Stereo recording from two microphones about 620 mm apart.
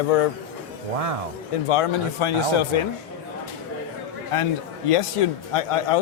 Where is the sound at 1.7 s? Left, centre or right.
Left.